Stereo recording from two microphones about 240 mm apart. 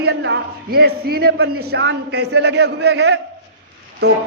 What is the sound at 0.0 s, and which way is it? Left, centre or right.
A man's voice, right.